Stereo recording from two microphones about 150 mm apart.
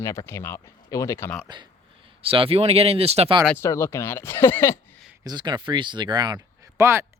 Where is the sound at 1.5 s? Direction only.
30° right (ahead or behind).